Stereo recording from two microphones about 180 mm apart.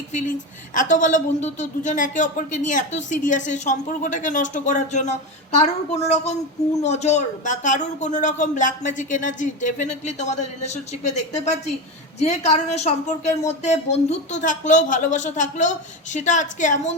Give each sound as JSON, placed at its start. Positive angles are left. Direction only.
{"t": 0.1, "sound": "a woman's voice", "side_deg": 45}